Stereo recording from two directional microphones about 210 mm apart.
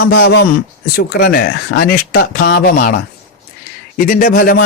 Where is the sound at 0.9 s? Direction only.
45° left (ahead or behind).